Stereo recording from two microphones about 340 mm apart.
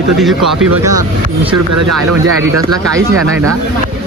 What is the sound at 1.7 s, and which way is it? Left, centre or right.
Speech, right.